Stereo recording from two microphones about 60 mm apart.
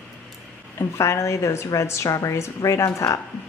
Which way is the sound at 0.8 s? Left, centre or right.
Left.